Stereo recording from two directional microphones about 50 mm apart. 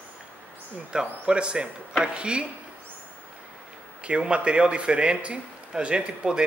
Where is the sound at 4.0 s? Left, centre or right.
Right.